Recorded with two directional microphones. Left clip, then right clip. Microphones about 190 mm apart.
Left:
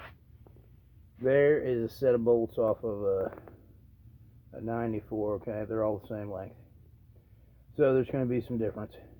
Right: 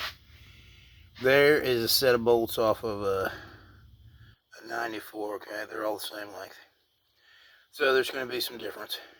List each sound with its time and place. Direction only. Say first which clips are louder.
1.2 s speech: right 3 dB; 10° right (ahead or behind)
4.8 s speech: right 1 dB; 15° right (ahead or behind)
7.8 s speech: right 1 dB; 10° right (ahead or behind)